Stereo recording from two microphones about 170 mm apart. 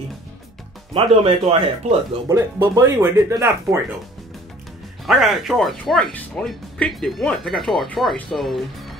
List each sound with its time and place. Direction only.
0.9 s speech: 35° right (ahead or behind)
2.2 s speech: 20° right (ahead or behind)
5.0 s speech: centre (ahead or behind)